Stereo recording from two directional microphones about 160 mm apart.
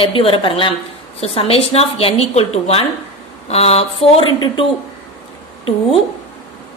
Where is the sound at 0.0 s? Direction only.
35° left (ahead or behind).